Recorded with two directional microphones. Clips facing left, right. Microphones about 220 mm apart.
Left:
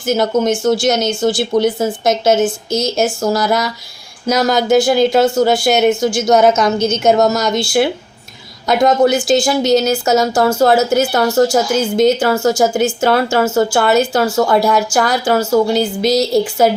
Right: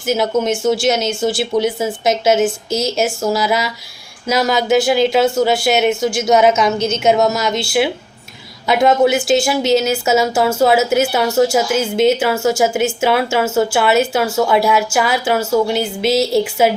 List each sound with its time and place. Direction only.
0.0 s speech: 5° right (ahead or behind)
2.6 s speech: 30° right (ahead or behind)
3.0 s speech: 5° right (ahead or behind)
8.6 s speech: 5° right (ahead or behind)